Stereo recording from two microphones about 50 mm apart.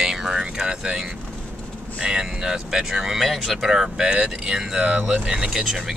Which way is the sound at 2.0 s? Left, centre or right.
Centre.